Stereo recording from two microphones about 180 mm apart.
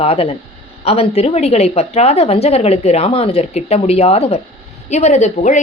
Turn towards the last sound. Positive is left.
turn(degrees=40)  # may be behind; listen again after turning